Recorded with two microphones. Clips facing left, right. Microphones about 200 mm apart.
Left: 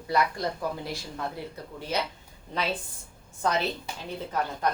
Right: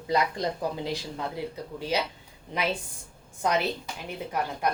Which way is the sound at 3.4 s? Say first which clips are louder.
Right 1 dB; 15° right (ahead or behind).